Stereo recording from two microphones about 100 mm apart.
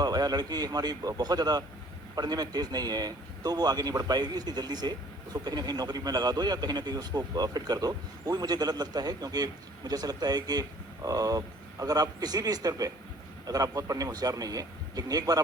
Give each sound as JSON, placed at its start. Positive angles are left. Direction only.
{"t": 0.0, "sound": "speech", "side_deg": -40}